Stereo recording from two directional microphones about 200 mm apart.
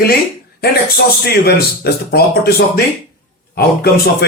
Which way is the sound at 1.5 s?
50° left (ahead or behind).